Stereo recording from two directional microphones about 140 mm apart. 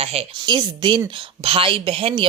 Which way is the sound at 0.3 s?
30° right (ahead or behind).